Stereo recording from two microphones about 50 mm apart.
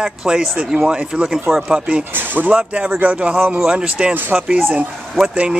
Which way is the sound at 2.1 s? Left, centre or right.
Right.